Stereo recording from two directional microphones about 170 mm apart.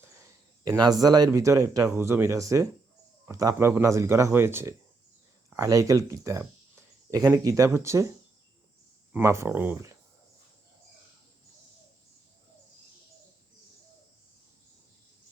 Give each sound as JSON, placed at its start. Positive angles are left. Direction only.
{"t": 0.6, "sound": "speech", "side_deg": -25}
{"t": 9.1, "sound": "speech", "side_deg": -15}